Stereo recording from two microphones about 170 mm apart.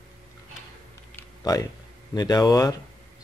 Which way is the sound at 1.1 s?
20° left (ahead or behind).